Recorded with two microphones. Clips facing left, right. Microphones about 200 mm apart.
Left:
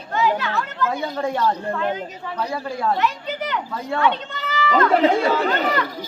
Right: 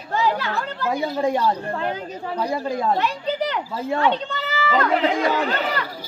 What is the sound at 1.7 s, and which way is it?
Speech, 30° right (ahead or behind).